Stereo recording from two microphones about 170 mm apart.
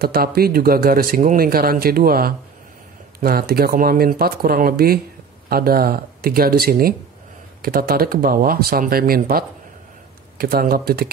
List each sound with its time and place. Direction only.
0.0 s speech: 65° right (ahead or behind)